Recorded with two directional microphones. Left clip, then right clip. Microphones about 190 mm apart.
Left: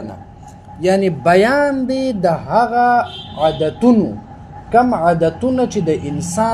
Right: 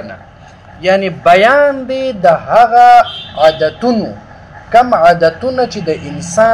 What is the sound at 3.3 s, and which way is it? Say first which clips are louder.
Speech: right 7 dB; 30° left (ahead or behind).